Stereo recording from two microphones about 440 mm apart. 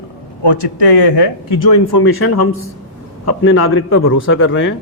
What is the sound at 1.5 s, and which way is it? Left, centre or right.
Speech, left.